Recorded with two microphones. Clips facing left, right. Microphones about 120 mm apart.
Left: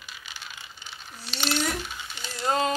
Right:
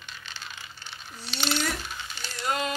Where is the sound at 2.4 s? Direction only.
30° left (ahead or behind).